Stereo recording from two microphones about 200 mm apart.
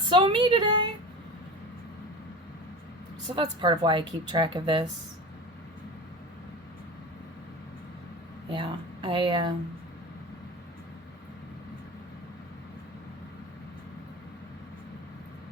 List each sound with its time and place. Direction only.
0.1 s a woman's voice: 25° right (ahead or behind)
3.3 s a woman's voice: 25° right (ahead or behind)
8.4 s speech: 25° right (ahead or behind)